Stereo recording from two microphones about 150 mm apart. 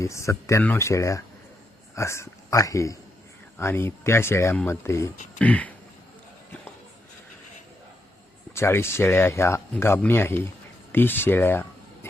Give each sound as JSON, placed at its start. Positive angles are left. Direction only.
{"t": 0.0, "sound": "speech", "side_deg": 20}
{"t": 8.5, "sound": "speech", "side_deg": 15}